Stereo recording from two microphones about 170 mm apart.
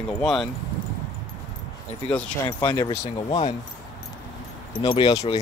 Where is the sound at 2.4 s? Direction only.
25° left (ahead or behind).